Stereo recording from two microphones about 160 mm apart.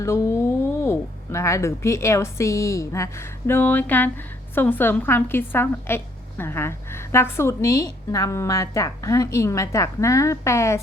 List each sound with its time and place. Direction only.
0.0 s a woman's voice: 20° left (ahead or behind)